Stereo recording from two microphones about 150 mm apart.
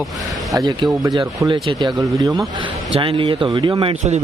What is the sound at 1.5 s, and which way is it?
Speech, 30° right (ahead or behind).